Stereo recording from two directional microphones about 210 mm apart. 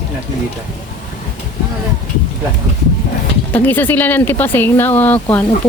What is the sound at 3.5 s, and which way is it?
Speech, 10° left (ahead or behind).